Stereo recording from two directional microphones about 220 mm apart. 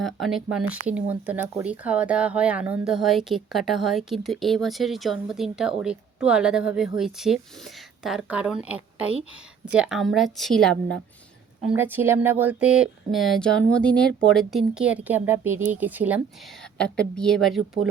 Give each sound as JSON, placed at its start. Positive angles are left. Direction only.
{"t": 0.0, "sound": "speech", "side_deg": 0}
{"t": 11.6, "sound": "speech", "side_deg": -10}
{"t": 16.7, "sound": "speech", "side_deg": 5}